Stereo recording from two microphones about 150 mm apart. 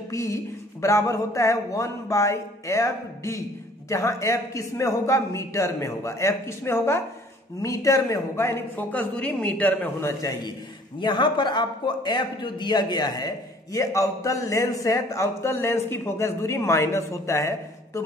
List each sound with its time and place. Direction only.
0.1 s a man's voice: 20° left (ahead or behind)
11.0 s a man's voice: 30° left (ahead or behind)